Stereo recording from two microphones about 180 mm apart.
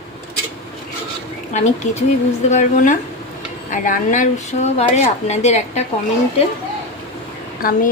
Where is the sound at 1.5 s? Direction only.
40° left (ahead or behind).